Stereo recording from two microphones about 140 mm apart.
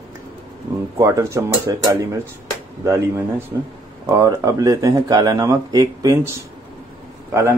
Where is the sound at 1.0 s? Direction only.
20° right (ahead or behind).